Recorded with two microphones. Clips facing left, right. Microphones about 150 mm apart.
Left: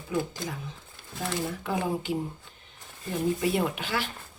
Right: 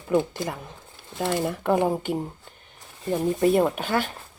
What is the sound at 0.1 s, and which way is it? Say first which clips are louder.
Speech: right 7 dB; 55° right (ahead or behind).